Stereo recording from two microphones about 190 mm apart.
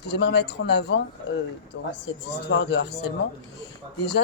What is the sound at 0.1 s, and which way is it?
Speech, 65° left (ahead or behind).